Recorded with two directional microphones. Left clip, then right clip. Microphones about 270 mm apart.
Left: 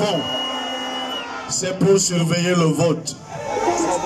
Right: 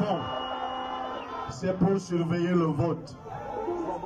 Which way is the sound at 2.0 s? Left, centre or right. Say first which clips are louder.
Left 8 dB; left.